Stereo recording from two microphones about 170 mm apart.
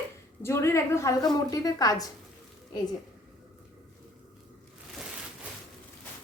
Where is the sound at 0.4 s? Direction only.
15° left (ahead or behind).